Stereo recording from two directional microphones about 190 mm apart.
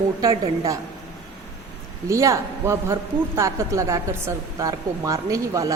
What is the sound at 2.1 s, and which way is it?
A woman's voice, 15° right (ahead or behind).